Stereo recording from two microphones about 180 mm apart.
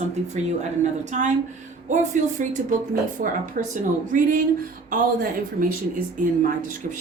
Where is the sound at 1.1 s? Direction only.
45° right (ahead or behind).